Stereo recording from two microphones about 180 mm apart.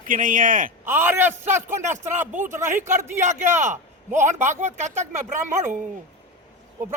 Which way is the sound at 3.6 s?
40° right (ahead or behind).